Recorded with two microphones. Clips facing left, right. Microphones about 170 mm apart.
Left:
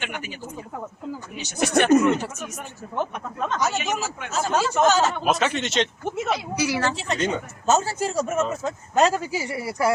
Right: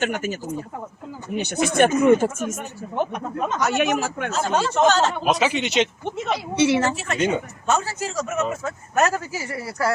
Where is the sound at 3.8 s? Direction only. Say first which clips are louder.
Right 6 dB; 60° right (ahead or behind).